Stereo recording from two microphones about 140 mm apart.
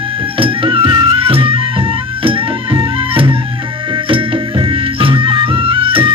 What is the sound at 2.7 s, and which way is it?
Music, 40° right (ahead or behind).